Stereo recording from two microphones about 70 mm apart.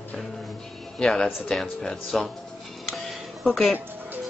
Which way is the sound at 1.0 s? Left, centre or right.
Centre.